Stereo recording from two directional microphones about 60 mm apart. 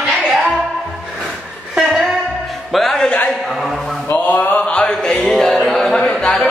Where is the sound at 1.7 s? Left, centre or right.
Centre.